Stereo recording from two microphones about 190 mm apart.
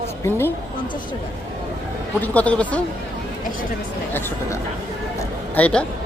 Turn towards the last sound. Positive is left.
turn(degrees=5)  # may be behind; listen again after turning